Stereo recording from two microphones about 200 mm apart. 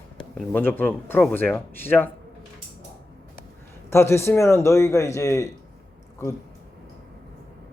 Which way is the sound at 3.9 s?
15° left (ahead or behind).